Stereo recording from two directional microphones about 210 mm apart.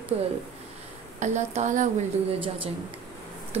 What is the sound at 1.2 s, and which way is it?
Speech, 35° right (ahead or behind).